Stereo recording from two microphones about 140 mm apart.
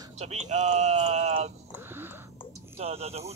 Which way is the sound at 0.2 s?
55° right (ahead or behind).